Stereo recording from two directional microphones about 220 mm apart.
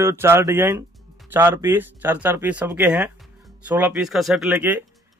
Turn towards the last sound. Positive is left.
turn(degrees=-5)  # may be behind; listen again after turning